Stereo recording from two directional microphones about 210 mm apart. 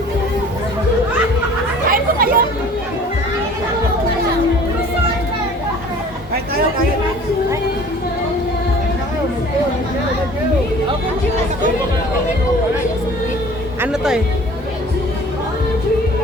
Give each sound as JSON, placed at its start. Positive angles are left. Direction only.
{"t": 1.9, "sound": "chatter", "side_deg": -45}
{"t": 13.8, "sound": "music", "side_deg": -5}